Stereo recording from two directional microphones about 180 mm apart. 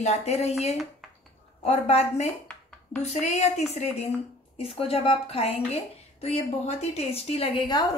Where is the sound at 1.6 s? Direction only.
35° left (ahead or behind).